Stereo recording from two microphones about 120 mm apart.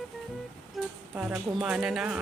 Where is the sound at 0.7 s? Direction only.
10° right (ahead or behind).